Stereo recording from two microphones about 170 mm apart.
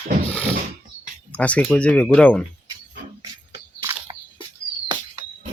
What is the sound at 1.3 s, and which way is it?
Speech, 10° left (ahead or behind).